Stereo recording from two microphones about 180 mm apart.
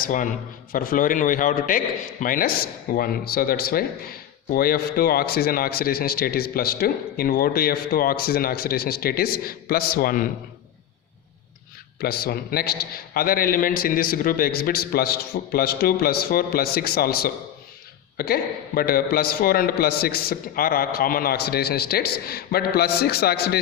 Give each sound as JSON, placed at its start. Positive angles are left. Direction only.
{"t": 0.0, "sound": "a man's voice", "side_deg": 50}
{"t": 11.9, "sound": "speech", "side_deg": 60}